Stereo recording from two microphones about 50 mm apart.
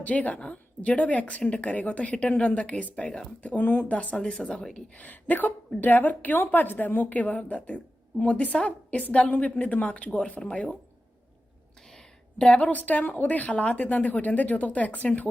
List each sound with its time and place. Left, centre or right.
0.0 s speech: left
4.9 s a woman's voice: left
12.4 s a woman's voice: left